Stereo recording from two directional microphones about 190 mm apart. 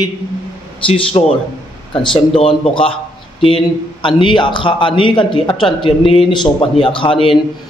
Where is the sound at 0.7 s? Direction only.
30° left (ahead or behind).